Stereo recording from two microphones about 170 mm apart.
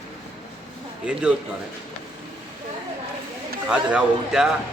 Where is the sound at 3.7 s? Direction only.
5° right (ahead or behind).